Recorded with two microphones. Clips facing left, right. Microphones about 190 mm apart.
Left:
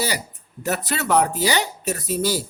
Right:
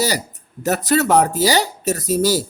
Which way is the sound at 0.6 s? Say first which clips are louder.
Right 8 dB; 40° right (ahead or behind).